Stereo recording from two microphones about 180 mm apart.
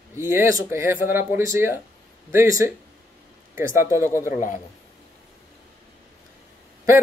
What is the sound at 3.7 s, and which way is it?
Speech, 15° right (ahead or behind).